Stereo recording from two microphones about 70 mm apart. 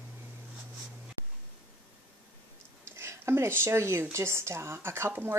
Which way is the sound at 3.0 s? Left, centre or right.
Right.